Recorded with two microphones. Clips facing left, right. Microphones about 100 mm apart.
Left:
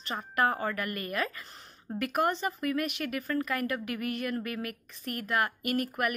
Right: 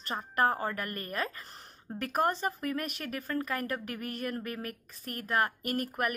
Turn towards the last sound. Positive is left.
turn(degrees=-35)  # may be behind; listen again after turning